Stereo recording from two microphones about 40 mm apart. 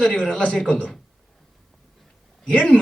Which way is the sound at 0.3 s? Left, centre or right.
Left.